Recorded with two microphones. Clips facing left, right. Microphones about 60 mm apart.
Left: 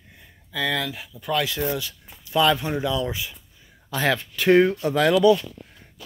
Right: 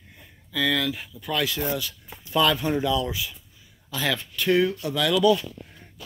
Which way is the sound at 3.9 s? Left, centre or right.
Left.